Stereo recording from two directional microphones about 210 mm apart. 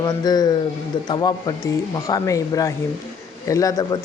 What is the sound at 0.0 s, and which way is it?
A man's voice, 20° left (ahead or behind).